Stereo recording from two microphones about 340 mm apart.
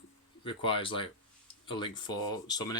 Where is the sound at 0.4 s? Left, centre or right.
Centre.